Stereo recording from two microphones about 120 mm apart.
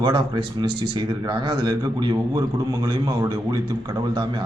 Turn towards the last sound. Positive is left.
turn(degrees=-35)  # may be behind; listen again after turning